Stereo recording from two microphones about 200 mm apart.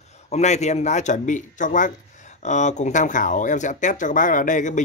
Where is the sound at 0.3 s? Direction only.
35° left (ahead or behind).